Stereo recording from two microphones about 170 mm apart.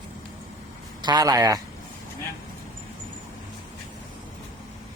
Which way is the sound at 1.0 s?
25° right (ahead or behind).